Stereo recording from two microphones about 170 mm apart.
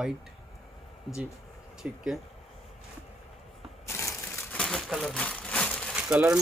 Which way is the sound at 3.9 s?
15° left (ahead or behind).